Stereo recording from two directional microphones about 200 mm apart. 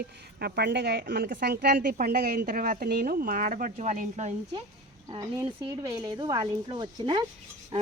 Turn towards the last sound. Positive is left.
turn(degrees=-20)  # may be behind; listen again after turning